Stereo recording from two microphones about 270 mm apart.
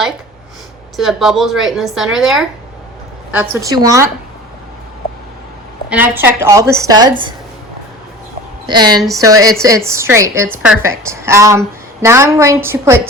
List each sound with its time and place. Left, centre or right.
0.9 s a woman's voice: centre
5.9 s a woman's voice: centre
8.6 s a woman's voice: centre